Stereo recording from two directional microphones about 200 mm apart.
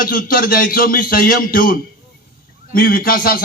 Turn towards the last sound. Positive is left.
turn(degrees=45)  # may be behind; listen again after turning